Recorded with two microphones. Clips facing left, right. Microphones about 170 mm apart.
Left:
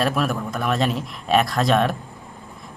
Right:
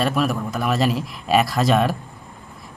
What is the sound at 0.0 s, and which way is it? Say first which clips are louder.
Speech: right 1 dB; centre (ahead or behind).